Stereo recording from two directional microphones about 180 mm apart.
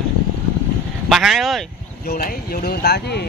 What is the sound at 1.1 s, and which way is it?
Speech, centre (ahead or behind).